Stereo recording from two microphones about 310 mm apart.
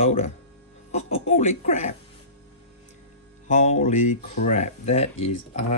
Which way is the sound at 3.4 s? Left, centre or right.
Left.